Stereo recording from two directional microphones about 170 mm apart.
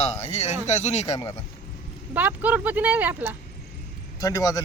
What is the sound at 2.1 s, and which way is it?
Speech, 10° right (ahead or behind).